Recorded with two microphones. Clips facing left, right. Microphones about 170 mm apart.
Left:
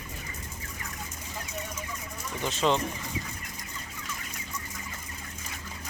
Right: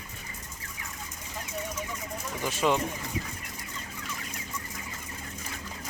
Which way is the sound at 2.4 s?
10° right (ahead or behind).